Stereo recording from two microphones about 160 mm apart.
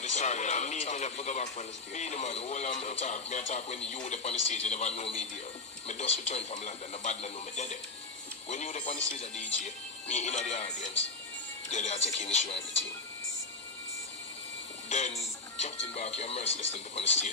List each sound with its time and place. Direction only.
0.1 s a man's voice: 45° left (ahead or behind)
10.0 s a man's voice: 40° left (ahead or behind)
14.9 s speech: 45° left (ahead or behind)